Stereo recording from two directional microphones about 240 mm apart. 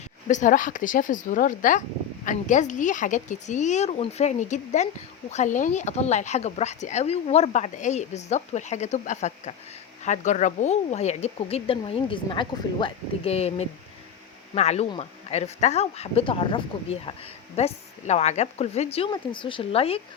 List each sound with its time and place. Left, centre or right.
0.3 s speech: left